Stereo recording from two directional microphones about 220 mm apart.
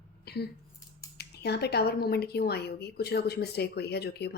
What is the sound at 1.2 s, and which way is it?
A woman's voice, 50° left (ahead or behind).